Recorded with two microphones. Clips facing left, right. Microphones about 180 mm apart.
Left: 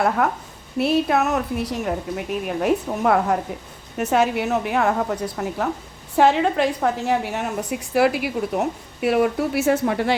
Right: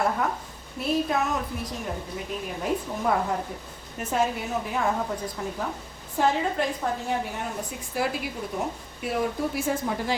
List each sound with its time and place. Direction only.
0.2 s a woman's voice: 80° left